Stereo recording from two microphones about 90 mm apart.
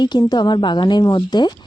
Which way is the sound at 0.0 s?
50° left (ahead or behind).